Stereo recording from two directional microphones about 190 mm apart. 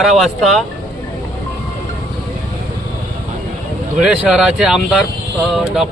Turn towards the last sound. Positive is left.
turn(degrees=0)  # may be behind; listen again after turning